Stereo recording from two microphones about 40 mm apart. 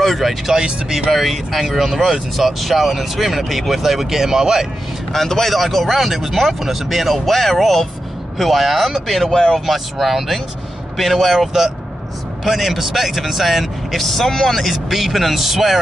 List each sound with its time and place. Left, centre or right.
0.0 s speech: centre
0.5 s speech: centre
1.1 s speech: centre
5.1 s speech: centre